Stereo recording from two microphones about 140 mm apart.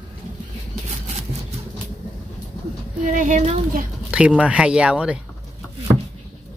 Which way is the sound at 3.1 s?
65° right (ahead or behind).